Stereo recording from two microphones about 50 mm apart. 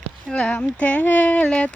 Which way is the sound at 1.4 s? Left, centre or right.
Centre.